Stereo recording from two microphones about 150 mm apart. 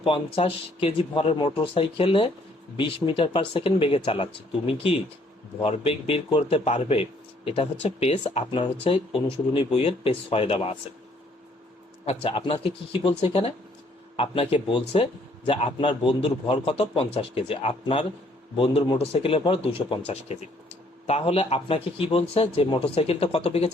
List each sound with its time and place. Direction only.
0.0 s speech: 40° left (ahead or behind)
12.0 s speech: 35° left (ahead or behind)